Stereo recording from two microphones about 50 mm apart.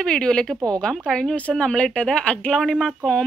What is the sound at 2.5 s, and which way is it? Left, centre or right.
Speech, centre.